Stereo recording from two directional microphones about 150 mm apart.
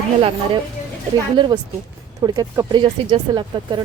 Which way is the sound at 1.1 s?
30° right (ahead or behind).